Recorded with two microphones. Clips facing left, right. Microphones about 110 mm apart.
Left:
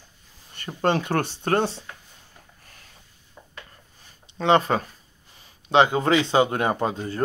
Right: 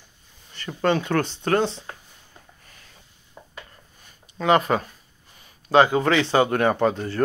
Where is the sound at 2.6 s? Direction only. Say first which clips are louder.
Even; 40° left (ahead or behind).